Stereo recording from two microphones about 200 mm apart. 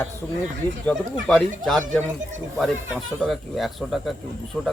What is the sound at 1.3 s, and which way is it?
Speech, 5° left (ahead or behind).